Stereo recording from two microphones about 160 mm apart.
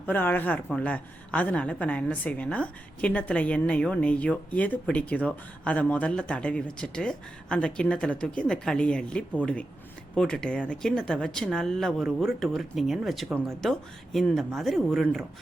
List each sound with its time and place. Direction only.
0.0 s a woman's voice: 10° left (ahead or behind)